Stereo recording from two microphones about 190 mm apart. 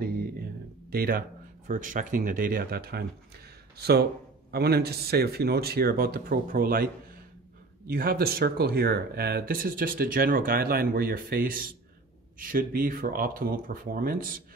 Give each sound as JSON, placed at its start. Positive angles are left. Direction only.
{"t": 0.9, "sound": "a man's voice", "side_deg": -50}